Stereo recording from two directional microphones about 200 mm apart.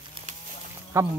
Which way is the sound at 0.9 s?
15° right (ahead or behind).